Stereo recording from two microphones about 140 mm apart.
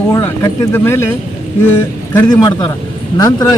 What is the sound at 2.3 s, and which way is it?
A man's voice, 30° left (ahead or behind).